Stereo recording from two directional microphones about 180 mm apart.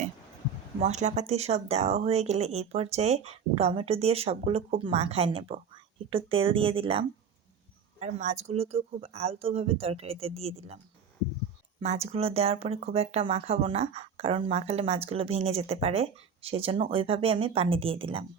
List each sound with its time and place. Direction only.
0.8 s speech: 40° right (ahead or behind)
7.9 s speech: 40° right (ahead or behind)
11.8 s speech: 35° right (ahead or behind)